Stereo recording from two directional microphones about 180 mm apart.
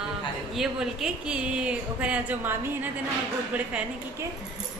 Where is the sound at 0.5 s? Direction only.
Centre (ahead or behind).